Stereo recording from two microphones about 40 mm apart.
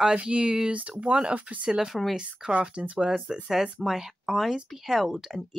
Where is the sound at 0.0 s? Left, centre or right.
Right.